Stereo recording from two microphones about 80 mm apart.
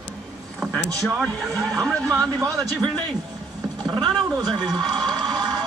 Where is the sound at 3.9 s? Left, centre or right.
Right.